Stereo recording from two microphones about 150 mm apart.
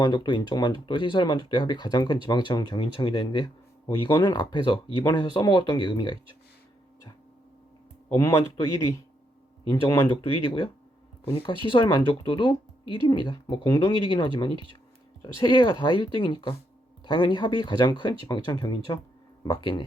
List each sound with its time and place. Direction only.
0.0 s speech: 25° left (ahead or behind)
3.4 s a sound: 20° left (ahead or behind)
4.0 s speech: 30° left (ahead or behind)
8.1 s speech: 20° left (ahead or behind)
10.2 s speech: 35° left (ahead or behind)